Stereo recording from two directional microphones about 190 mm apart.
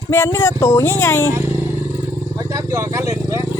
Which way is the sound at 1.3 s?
15° right (ahead or behind).